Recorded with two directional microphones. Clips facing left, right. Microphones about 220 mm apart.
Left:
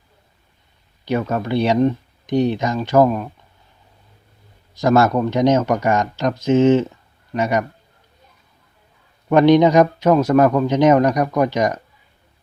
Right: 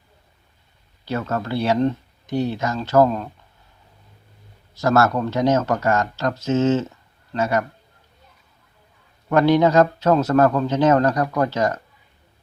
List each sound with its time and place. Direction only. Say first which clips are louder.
1.0 s speech: left 4 dB; 15° left (ahead or behind)
4.7 s speech: left 3 dB; 15° left (ahead or behind)
9.3 s speech: left 4 dB; 15° left (ahead or behind)